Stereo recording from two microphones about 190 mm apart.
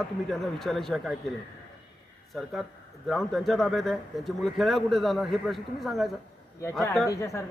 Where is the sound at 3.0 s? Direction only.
Centre (ahead or behind).